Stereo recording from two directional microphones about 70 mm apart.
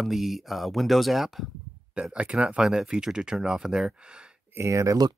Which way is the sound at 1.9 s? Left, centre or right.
Centre.